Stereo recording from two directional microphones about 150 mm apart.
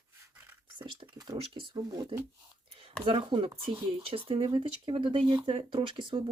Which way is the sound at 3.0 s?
35° right (ahead or behind).